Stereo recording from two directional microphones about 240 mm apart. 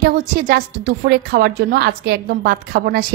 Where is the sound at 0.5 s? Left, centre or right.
Right.